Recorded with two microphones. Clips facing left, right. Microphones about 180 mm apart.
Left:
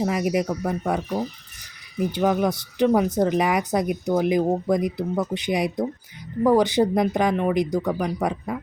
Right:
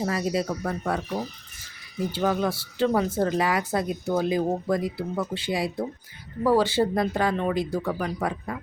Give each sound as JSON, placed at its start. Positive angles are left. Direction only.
{"t": 0.0, "sound": "speech", "side_deg": 15}